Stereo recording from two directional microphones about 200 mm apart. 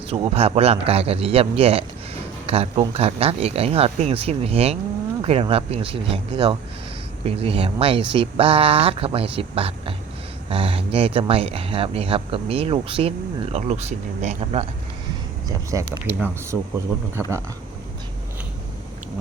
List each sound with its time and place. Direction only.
0.1 s speech: 30° right (ahead or behind)
15.4 s speech: 20° right (ahead or behind)